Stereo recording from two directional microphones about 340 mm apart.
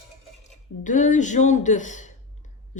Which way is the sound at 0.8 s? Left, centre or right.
Left.